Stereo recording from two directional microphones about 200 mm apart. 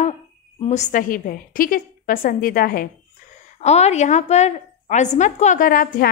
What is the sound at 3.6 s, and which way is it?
A woman's voice, 35° left (ahead or behind).